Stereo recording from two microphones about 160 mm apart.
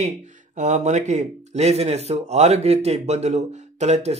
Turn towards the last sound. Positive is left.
turn(degrees=-45)  # may be behind; listen again after turning